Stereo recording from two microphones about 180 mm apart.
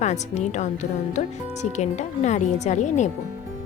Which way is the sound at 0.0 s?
40° left (ahead or behind).